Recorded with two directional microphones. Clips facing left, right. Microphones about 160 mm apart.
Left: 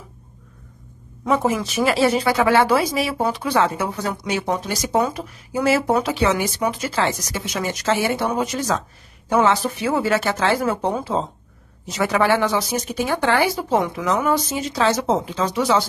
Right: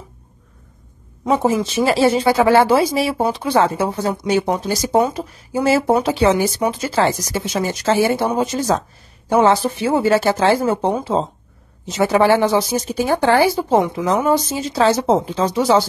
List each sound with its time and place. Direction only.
1.3 s speech: 30° right (ahead or behind)